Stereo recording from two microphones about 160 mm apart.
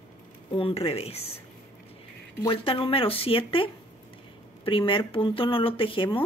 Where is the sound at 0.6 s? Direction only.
35° left (ahead or behind).